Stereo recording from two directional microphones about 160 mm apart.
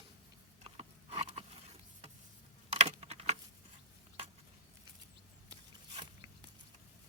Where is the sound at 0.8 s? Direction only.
35° right (ahead or behind).